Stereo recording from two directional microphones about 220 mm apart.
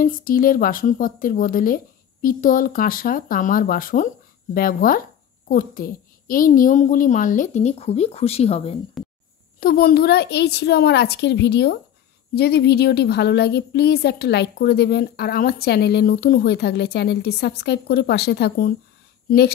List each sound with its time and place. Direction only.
0.0 s a woman's voice: 40° left (ahead or behind)
9.0 s a sound: centre (ahead or behind)
9.6 s a woman's voice: 45° left (ahead or behind)